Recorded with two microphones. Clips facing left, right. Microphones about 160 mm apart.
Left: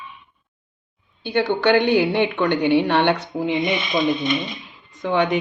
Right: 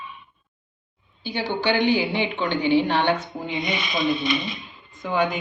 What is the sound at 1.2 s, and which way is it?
A woman's voice, 60° left (ahead or behind).